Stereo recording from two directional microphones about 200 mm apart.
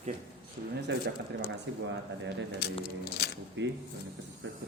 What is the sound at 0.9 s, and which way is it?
Speech, 60° right (ahead or behind).